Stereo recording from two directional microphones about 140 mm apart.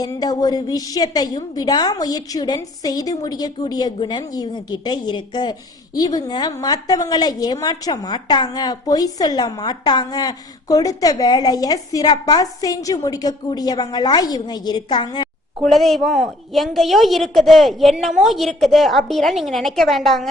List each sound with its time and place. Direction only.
0.0 s a woman's voice: 25° left (ahead or behind)
15.6 s a woman's voice: centre (ahead or behind)